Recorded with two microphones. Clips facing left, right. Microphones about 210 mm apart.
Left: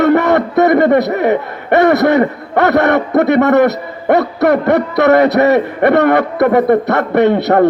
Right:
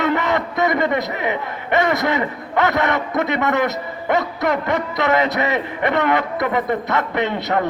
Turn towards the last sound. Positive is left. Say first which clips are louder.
# left 11 dB
turn(degrees=65)  # may be behind; listen again after turning